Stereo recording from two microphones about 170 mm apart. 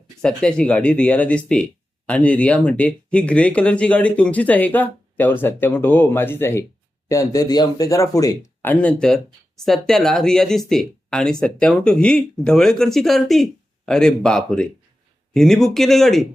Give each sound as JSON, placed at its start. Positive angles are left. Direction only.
{"t": 0.2, "sound": "speech", "side_deg": 5}
{"t": 8.6, "sound": "speech", "side_deg": 10}